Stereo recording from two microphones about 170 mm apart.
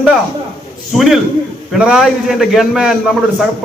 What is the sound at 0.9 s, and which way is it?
A man's voice, centre (ahead or behind).